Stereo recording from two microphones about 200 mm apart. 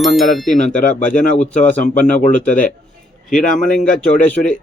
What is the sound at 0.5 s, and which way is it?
Speech, 40° left (ahead or behind).